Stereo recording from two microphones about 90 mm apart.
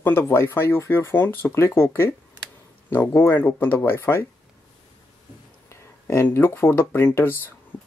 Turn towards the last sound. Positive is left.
turn(degrees=25)  # may be behind; listen again after turning